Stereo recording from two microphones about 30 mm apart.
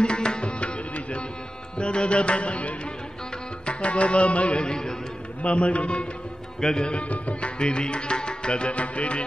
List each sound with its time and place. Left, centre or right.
0.0 s music: left
1.8 s music: left
3.6 s carnatic music: left
4.6 s music: left
5.4 s a man's voice: left
6.6 s music: left
6.9 s music: left
8.7 s a man's voice: left